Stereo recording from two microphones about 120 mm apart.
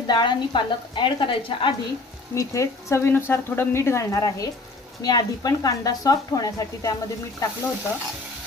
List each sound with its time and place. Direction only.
0.0 s a woman's voice: 40° left (ahead or behind)
2.3 s speech: 25° left (ahead or behind)